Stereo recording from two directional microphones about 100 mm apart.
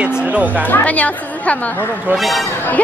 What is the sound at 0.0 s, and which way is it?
Music, 15° right (ahead or behind).